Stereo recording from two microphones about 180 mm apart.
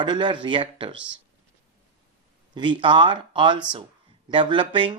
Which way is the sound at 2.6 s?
25° right (ahead or behind).